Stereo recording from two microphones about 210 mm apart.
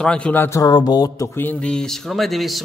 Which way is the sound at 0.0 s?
5° left (ahead or behind).